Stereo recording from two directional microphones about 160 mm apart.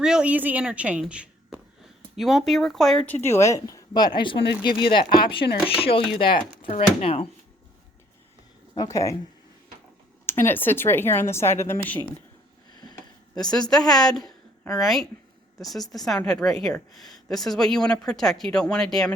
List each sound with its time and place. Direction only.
0.0 s a woman's voice: 5° right (ahead or behind)
3.2 s speech: 15° left (ahead or behind); by 7.3 s 35° left (ahead or behind)
8.7 s speech: 20° left (ahead or behind)
10.2 s a woman's voice: 15° left (ahead or behind)
12.7 s a sound: 25° left (ahead or behind)
13.4 s speech: 25° left (ahead or behind)
14.6 s speech: centre (ahead or behind)